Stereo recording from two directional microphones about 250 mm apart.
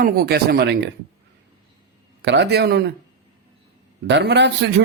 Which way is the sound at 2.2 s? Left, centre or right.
Right.